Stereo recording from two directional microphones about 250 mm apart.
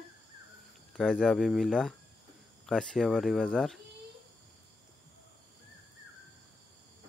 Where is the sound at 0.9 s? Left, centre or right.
Centre.